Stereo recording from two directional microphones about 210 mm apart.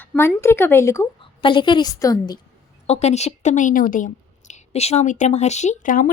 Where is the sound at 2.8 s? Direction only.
30° left (ahead or behind).